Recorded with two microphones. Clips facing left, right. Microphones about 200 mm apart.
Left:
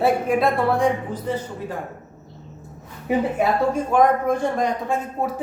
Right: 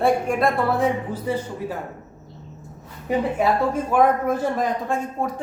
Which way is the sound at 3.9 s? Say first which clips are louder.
Even; 5° right (ahead or behind).